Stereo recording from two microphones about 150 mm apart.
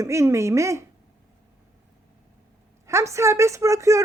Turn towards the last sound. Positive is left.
turn(degrees=-20)  # may be behind; listen again after turning